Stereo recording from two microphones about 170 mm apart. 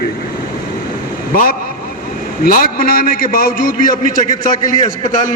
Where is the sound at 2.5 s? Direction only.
60° left (ahead or behind).